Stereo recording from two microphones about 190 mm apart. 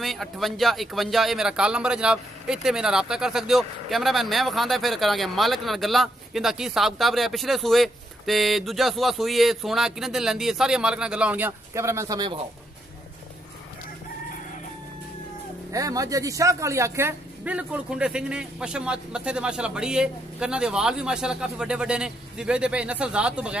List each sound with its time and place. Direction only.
0.0 s speech: centre (ahead or behind); by 12.4 s 20° right (ahead or behind)
15.7 s speech: 15° right (ahead or behind)